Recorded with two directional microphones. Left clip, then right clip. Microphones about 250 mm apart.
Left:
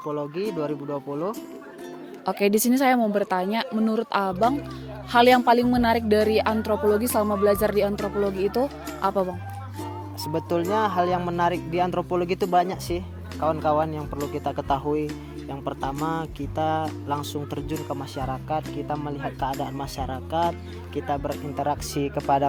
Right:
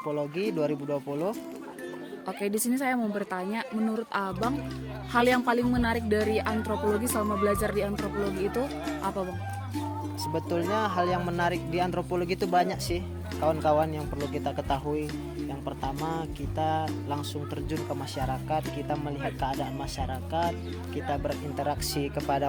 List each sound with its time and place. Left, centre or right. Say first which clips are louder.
0.1 s speech: left 2 dB; centre
2.2 s a woman's voice: left 9 dB; left
10.3 s speech: left 5 dB; left
21.6 s speech: left 5 dB; left